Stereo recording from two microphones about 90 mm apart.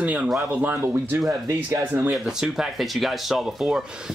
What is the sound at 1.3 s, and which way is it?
Speech, 35° right (ahead or behind).